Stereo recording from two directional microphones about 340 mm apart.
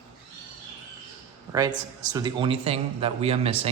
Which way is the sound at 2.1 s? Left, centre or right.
Centre.